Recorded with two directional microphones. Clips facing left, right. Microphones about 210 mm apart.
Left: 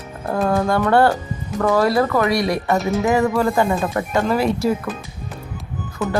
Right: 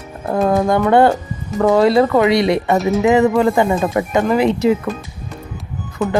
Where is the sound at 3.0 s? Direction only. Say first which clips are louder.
Right 5 dB; 20° right (ahead or behind).